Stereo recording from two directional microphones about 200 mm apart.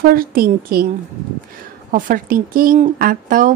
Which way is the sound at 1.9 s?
45° right (ahead or behind).